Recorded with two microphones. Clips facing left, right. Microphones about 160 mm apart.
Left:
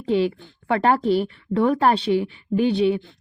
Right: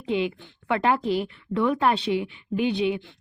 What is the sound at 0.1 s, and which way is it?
Speech, 35° left (ahead or behind).